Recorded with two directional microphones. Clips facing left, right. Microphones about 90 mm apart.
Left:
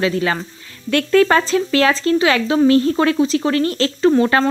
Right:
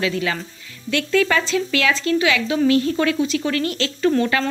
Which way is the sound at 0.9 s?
45° left (ahead or behind).